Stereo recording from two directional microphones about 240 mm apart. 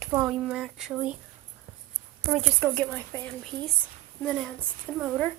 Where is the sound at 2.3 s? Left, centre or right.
Centre.